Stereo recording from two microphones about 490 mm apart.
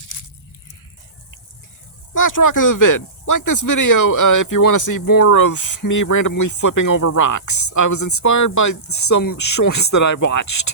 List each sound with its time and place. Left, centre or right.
2.1 s speech: left